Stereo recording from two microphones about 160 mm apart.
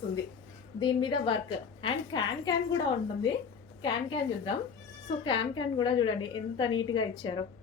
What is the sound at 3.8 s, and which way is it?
A woman's voice, 30° left (ahead or behind).